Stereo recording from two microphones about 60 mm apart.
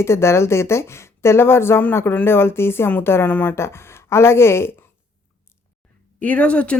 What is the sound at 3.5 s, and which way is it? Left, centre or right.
Speech, left.